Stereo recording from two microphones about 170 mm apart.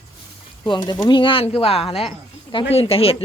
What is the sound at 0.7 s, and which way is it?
Speech, 25° left (ahead or behind).